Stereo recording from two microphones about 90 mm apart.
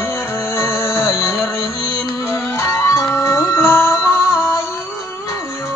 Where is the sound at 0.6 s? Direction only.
30° left (ahead or behind).